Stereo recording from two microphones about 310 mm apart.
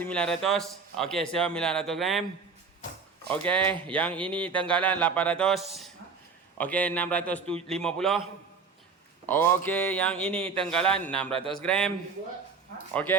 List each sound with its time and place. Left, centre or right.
0.0 s a man's voice: centre
3.2 s a man's voice: centre
9.2 s a man's voice: centre
12.9 s speech: centre